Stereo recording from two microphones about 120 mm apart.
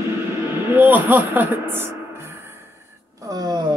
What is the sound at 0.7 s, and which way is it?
Speech, 15° right (ahead or behind).